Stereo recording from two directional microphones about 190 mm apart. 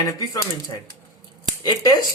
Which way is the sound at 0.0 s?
20° left (ahead or behind).